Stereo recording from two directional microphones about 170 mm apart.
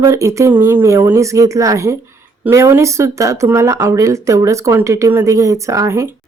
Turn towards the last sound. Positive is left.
turn(degrees=-15)  # may be behind; listen again after turning